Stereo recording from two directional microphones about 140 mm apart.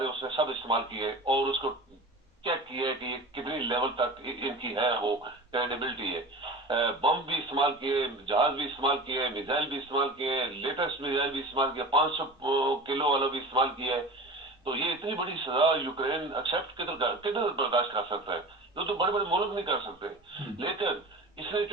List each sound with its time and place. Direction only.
0.2 s a man's voice: 35° right (ahead or behind)